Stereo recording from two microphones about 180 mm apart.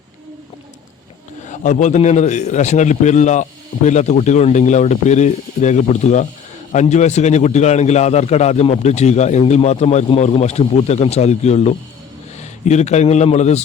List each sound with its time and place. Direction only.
1.5 s a man's voice: 45° left (ahead or behind)